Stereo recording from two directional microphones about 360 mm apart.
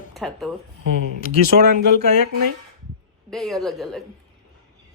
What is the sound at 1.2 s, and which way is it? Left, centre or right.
Speech, left.